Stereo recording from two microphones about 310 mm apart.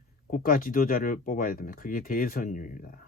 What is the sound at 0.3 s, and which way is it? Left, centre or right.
Speech, left.